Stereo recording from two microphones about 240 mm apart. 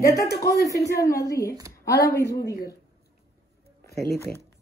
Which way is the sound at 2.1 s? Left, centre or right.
Centre.